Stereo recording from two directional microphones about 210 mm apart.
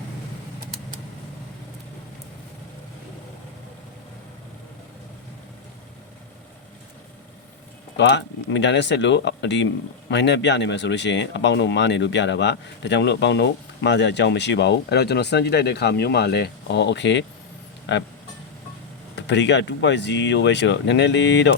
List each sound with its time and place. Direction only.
7.9 s speech: 55° left (ahead or behind)
19.1 s speech: 55° left (ahead or behind)